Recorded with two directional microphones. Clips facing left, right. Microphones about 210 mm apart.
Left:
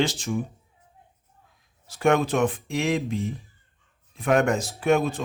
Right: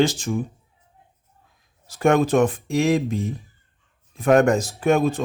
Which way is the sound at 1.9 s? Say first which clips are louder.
Right 3 dB; 45° right (ahead or behind).